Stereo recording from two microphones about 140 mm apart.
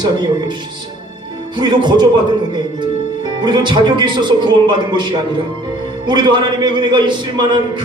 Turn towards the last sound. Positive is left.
turn(degrees=-35)  # may be behind; listen again after turning